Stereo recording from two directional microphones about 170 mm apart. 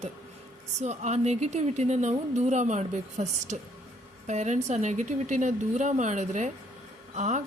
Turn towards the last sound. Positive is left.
turn(degrees=-45)  # may be behind; listen again after turning